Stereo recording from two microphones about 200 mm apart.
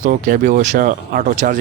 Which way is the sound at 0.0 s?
45° right (ahead or behind).